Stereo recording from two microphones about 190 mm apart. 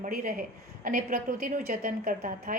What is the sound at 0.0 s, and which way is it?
A woman's voice, 50° right (ahead or behind).